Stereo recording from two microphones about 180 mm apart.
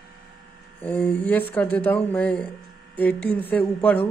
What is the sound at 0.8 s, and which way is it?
Speech, 10° left (ahead or behind).